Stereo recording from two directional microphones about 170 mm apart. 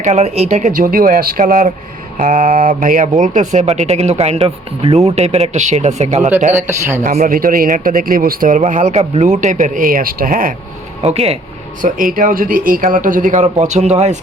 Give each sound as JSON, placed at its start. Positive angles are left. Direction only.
{"t": 0.0, "sound": "speech", "side_deg": -40}
{"t": 6.5, "sound": "speech", "side_deg": -15}
{"t": 7.0, "sound": "a man's voice", "side_deg": -55}
{"t": 11.0, "sound": "speech", "side_deg": -35}
{"t": 11.8, "sound": "speech", "side_deg": -55}